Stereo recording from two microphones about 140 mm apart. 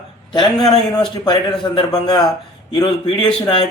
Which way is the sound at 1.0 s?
30° left (ahead or behind).